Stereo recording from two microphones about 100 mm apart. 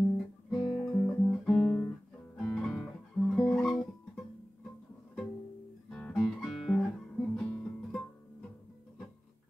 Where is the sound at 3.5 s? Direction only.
5° left (ahead or behind).